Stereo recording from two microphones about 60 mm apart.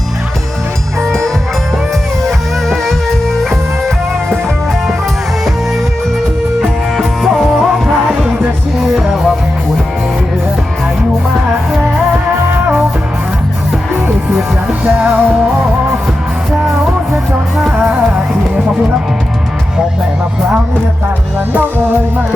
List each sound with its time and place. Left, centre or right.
1.0 s music: centre
6.6 s music: centre
14.3 s music: centre
17.6 s music: centre
21.5 s music: right